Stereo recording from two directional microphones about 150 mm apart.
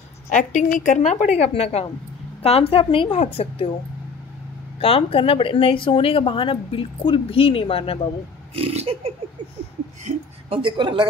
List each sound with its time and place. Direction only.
0.3 s a woman's voice: 55° left (ahead or behind)
4.7 s speech: 40° left (ahead or behind)
8.5 s a woman's voice: 40° right (ahead or behind)